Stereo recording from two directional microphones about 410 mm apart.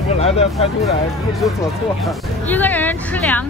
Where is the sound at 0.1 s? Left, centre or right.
Centre.